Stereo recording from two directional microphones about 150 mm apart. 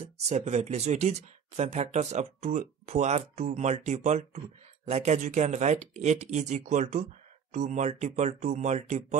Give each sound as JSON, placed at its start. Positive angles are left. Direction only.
{"t": 0.3, "sound": "speech", "side_deg": -50}